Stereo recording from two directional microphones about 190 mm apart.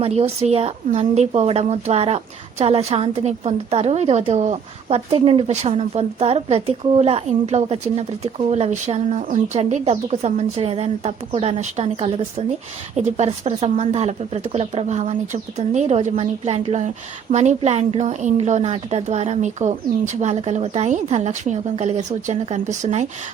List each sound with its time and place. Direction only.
0.0 s a woman's voice: 35° right (ahead or behind)